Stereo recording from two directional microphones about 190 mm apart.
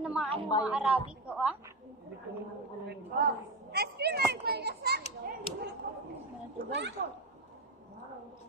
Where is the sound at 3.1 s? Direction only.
55° right (ahead or behind).